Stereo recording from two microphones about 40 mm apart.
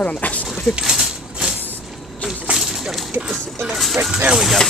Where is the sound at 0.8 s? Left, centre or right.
Centre.